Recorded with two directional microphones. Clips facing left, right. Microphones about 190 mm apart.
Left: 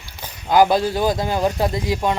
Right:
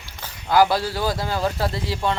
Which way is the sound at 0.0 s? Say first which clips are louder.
Left 2 dB; 15° left (ahead or behind).